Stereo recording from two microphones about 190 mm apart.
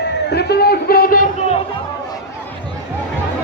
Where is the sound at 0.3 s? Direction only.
60° left (ahead or behind); by 1.5 s 45° left (ahead or behind).